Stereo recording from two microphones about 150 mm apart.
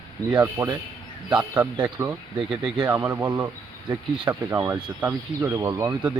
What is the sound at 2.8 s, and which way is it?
Speech, 15° right (ahead or behind).